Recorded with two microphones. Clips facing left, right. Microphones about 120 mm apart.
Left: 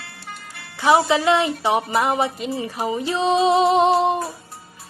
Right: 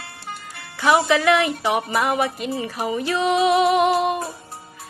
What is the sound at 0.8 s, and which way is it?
A woman's voice, 20° left (ahead or behind).